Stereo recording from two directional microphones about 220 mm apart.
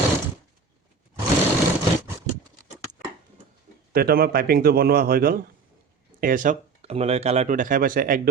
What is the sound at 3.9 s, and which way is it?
Speech, 45° right (ahead or behind).